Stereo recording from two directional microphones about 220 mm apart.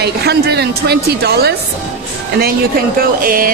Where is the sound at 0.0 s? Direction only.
45° right (ahead or behind).